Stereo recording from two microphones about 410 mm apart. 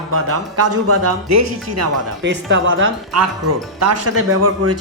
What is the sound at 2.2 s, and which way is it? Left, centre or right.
Speech, right.